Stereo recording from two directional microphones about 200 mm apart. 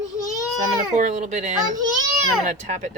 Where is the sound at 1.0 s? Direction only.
35° right (ahead or behind).